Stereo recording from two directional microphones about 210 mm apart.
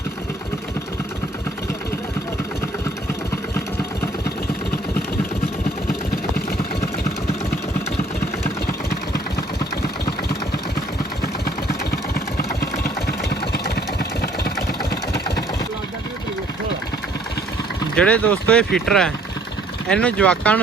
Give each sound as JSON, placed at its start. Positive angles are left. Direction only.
{"t": 11.4, "sound": "engine", "side_deg": 45}
{"t": 17.9, "sound": "speech", "side_deg": 5}